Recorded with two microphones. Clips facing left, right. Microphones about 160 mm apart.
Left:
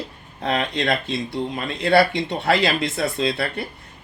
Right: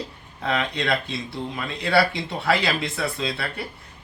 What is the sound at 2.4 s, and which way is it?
Speech, 45° left (ahead or behind).